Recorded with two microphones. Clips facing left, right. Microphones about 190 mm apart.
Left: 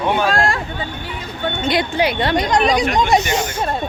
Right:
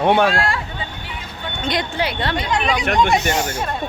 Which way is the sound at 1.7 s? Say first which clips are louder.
Left 4 dB; 10° left (ahead or behind).